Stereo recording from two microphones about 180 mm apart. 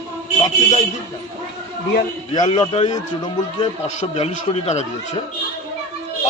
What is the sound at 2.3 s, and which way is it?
Speech, 25° left (ahead or behind).